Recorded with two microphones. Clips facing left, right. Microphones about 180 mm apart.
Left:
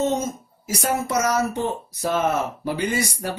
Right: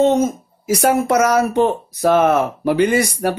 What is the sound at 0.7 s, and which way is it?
Speech, 65° right (ahead or behind).